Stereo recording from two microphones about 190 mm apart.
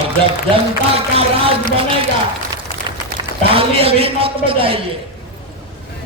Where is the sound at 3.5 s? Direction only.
30° right (ahead or behind).